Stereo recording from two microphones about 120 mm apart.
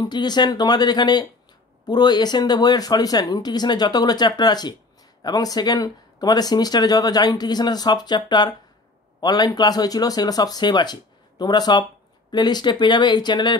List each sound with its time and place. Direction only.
0.0 s speech: 35° left (ahead or behind)